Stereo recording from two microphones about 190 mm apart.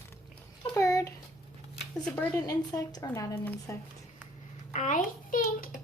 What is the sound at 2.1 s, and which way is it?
Speech, 10° left (ahead or behind).